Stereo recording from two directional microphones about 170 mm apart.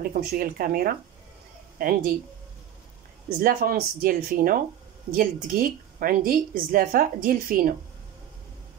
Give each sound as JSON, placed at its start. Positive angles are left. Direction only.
{"t": 0.0, "sound": "a woman's voice", "side_deg": -60}
{"t": 3.3, "sound": "a woman's voice", "side_deg": -60}